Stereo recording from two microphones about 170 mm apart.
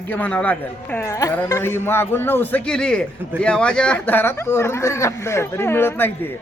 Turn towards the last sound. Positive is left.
turn(degrees=10)  # may be behind; listen again after turning